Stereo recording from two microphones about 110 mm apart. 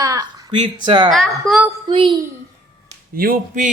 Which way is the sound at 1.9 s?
50° right (ahead or behind).